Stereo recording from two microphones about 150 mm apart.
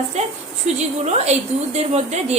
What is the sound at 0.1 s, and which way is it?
A woman's voice, 45° right (ahead or behind).